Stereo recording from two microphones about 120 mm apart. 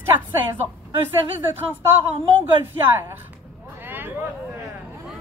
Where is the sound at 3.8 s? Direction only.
15° right (ahead or behind).